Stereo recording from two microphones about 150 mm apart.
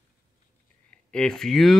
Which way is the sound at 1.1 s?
5° left (ahead or behind).